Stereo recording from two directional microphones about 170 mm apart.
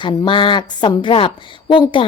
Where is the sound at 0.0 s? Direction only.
25° left (ahead or behind).